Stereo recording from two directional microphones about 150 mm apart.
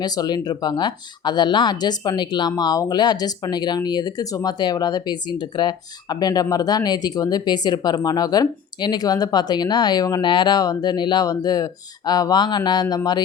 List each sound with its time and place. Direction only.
0.0 s speech: 25° left (ahead or behind)